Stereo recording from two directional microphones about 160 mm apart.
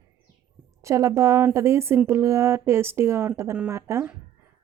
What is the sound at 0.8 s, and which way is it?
A woman's voice, 20° right (ahead or behind).